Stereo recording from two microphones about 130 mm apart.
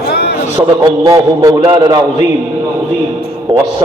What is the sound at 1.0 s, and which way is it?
A man's voice, 25° right (ahead or behind).